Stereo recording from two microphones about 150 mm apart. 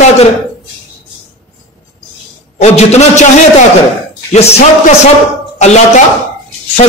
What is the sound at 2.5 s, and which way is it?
Speech, 45° left (ahead or behind).